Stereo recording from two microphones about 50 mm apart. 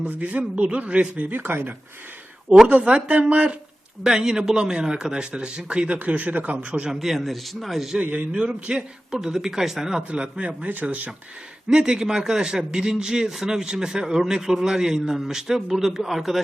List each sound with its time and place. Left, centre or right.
0.0 s speech: right
1.4 s speech: right
2.6 s speech: right
4.0 s speech: centre; by 6.9 s right
6.9 s a man's voice: centre
8.0 s a man's voice: right; by 10.0 s centre
10.1 s speech: right
11.7 s a man's voice: centre